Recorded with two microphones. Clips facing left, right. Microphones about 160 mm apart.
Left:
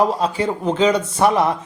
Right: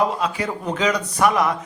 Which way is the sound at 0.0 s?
30° left (ahead or behind).